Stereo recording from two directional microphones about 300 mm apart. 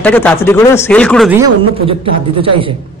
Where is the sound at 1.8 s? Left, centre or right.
Centre.